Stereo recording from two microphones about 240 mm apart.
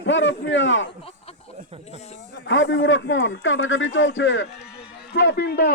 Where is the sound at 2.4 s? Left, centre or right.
Left.